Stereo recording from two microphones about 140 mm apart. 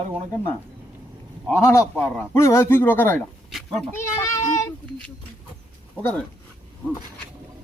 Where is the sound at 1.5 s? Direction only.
20° left (ahead or behind).